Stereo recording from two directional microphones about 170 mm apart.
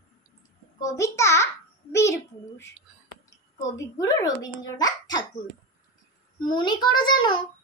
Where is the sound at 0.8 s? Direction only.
20° left (ahead or behind).